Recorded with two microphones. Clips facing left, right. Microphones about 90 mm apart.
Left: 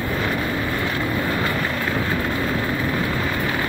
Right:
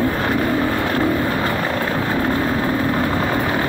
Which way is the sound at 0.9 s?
45° right (ahead or behind).